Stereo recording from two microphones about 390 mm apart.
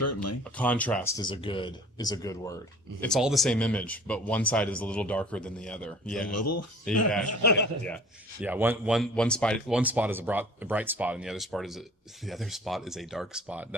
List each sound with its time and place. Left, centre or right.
0.0 s speech: left
0.5 s speech: centre
6.3 s speech: left
7.9 s speech: centre